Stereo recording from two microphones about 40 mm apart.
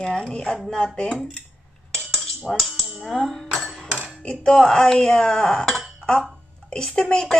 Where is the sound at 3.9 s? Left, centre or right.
Centre.